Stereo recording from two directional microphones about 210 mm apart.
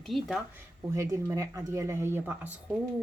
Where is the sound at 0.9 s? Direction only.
15° right (ahead or behind).